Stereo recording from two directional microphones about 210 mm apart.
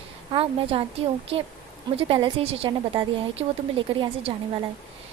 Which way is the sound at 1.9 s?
25° right (ahead or behind).